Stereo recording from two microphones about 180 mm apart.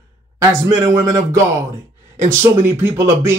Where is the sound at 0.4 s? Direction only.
20° right (ahead or behind).